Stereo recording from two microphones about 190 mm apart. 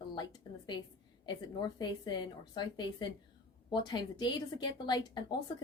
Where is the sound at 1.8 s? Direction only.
20° left (ahead or behind).